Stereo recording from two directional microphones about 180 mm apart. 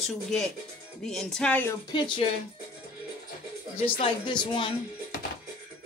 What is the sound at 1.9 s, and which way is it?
Speech, 25° left (ahead or behind).